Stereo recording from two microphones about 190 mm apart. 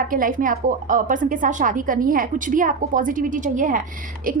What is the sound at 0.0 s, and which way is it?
A woman's voice, 45° right (ahead or behind).